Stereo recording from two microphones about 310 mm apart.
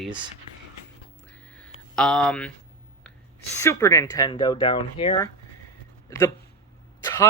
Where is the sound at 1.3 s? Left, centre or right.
Centre.